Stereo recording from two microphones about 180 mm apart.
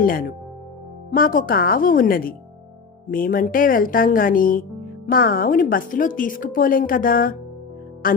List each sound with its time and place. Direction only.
0.0 s speech: 50° left (ahead or behind)